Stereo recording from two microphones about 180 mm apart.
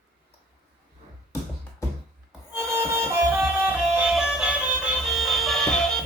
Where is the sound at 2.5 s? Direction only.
15° right (ahead or behind).